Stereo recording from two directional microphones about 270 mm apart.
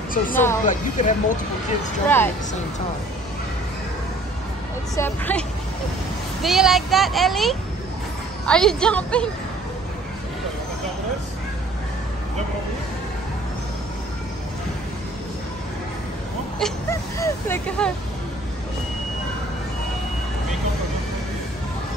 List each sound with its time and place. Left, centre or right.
0.3 s speech: centre
0.7 s speech: left
2.0 s speech: centre
4.9 s speech: centre
6.4 s speech: centre
16.5 s speech: centre